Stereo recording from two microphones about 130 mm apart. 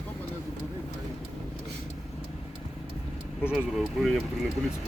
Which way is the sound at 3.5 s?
Centre (ahead or behind).